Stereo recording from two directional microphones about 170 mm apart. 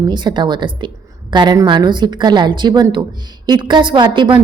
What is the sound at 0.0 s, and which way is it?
A woman's voice, 25° right (ahead or behind).